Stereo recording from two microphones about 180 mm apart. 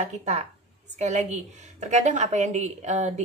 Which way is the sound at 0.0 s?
40° right (ahead or behind).